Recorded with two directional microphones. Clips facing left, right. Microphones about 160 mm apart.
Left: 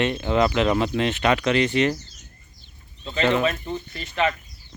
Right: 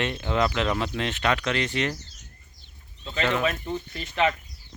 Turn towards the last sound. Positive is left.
turn(degrees=-15)  # may be behind; listen again after turning